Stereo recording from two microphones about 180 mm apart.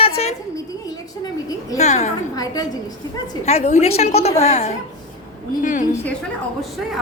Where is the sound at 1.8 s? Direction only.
40° left (ahead or behind).